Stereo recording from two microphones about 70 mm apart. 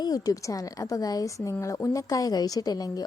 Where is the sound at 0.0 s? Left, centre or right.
Left.